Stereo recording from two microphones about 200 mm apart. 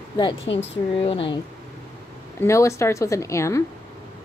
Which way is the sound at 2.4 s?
15° left (ahead or behind).